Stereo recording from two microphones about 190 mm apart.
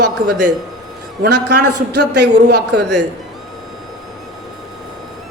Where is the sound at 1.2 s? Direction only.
60° right (ahead or behind).